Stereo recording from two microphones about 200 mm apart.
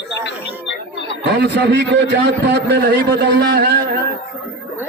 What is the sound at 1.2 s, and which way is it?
A man's voice, 55° right (ahead or behind).